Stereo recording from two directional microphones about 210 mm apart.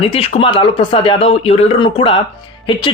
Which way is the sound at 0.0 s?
25° left (ahead or behind).